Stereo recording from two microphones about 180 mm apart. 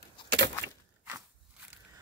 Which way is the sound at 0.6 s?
80° right.